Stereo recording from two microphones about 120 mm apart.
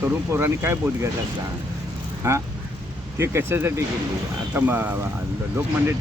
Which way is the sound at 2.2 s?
20° right (ahead or behind).